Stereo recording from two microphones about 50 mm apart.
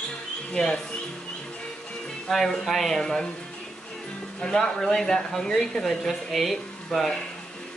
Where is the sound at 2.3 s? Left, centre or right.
Centre.